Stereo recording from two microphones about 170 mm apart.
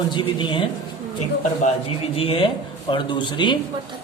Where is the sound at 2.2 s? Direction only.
35° left (ahead or behind).